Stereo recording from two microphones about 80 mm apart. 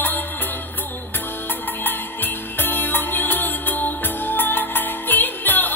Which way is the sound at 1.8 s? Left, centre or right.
Left.